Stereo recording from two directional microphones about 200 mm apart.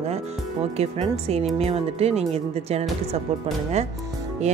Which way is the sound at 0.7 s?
30° right (ahead or behind).